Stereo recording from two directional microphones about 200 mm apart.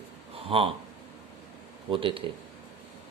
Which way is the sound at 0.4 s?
25° right (ahead or behind).